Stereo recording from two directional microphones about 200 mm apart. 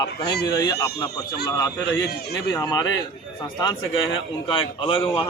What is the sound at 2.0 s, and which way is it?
Speech, 55° left (ahead or behind).